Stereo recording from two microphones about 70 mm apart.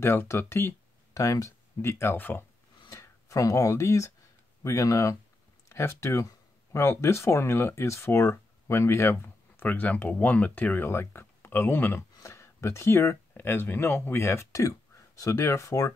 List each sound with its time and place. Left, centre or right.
0.0 s speech: left
1.1 s speech: left
2.9 s speech: left
9.1 s speech: left
12.2 s speech: left